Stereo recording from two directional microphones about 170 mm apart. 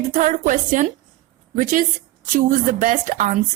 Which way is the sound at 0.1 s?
45° right (ahead or behind).